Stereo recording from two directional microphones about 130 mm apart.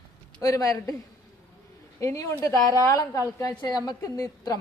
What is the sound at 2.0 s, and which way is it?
A woman's voice, 25° left (ahead or behind).